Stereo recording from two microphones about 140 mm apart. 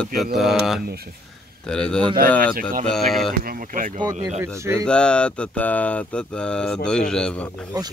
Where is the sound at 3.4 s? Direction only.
90° right.